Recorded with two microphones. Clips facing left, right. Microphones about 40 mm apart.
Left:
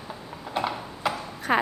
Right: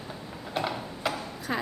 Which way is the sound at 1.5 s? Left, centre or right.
Left.